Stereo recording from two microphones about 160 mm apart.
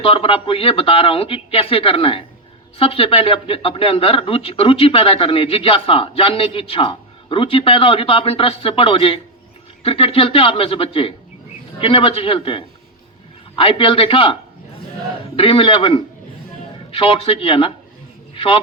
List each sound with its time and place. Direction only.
0.0 s speech: 35° left (ahead or behind)
15.4 s speech: 35° left (ahead or behind)